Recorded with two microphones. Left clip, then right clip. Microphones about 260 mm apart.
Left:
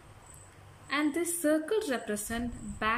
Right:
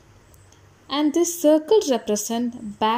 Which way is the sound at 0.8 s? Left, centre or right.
Centre.